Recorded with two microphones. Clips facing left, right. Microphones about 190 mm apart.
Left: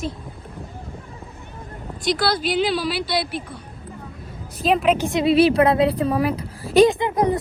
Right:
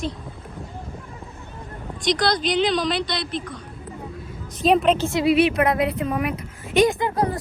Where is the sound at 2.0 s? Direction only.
5° left (ahead or behind).